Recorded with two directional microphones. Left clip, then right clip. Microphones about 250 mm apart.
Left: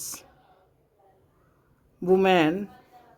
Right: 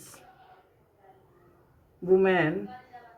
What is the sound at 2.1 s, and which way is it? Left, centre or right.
Speech, left.